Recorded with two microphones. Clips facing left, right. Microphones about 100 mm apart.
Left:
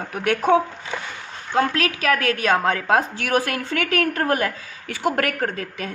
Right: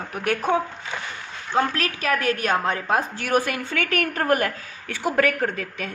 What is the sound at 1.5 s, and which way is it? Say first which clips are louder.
A woman's voice: left 2 dB; 80° left.